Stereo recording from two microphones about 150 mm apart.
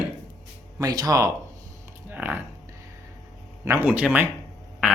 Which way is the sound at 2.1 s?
10° right (ahead or behind).